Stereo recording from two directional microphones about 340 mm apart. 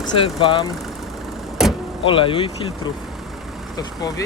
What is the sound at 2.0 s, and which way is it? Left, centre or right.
Speech, centre.